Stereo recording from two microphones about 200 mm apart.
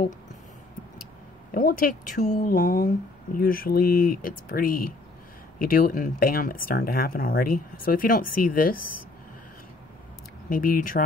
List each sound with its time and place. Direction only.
1.5 s speech: 45° left (ahead or behind)
10.5 s speech: 45° left (ahead or behind)